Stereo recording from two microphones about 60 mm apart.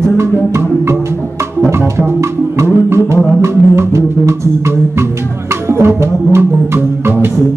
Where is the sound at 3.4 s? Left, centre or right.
Right.